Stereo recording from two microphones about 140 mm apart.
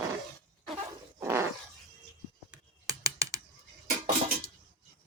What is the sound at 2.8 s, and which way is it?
Typing, 25° right (ahead or behind).